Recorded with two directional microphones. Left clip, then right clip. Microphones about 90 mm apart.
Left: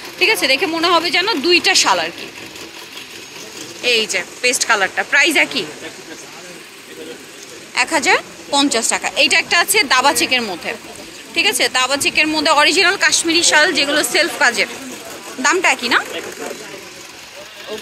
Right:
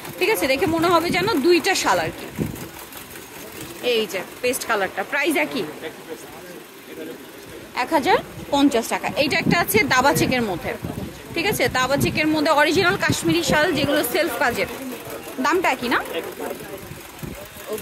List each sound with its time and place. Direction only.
0.2 s speech: 40° right (ahead or behind)
3.8 s speech: 20° right (ahead or behind)
7.7 s a woman's voice: 30° right (ahead or behind)
8.9 s speech: 25° right (ahead or behind)
12.9 s speech: 20° right (ahead or behind)